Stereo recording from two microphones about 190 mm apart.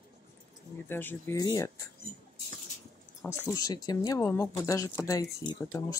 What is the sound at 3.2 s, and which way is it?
Speech, 15° left (ahead or behind).